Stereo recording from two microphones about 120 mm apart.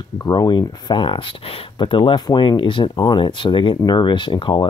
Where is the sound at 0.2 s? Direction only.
35° left (ahead or behind).